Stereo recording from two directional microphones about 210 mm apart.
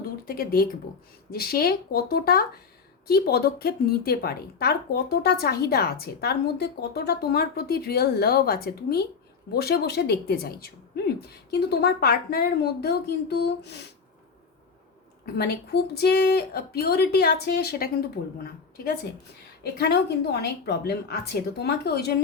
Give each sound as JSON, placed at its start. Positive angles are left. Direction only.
{"t": 0.3, "sound": "a woman's voice", "side_deg": 45}
{"t": 15.4, "sound": "a woman's voice", "side_deg": 50}